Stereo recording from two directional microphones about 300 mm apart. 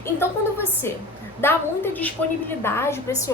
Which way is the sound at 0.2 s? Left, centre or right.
Centre.